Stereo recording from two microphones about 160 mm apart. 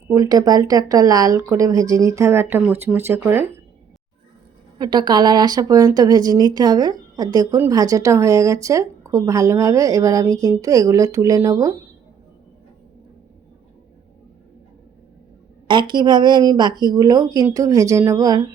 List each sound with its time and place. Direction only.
0.1 s speech: 20° right (ahead or behind)
4.8 s speech: 25° right (ahead or behind)
15.6 s speech: 30° right (ahead or behind)